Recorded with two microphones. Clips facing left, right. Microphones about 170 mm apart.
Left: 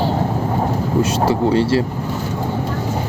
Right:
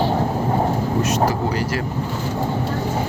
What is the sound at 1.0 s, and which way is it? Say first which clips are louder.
Vehicle: left 3 dB; 30° left (ahead or behind).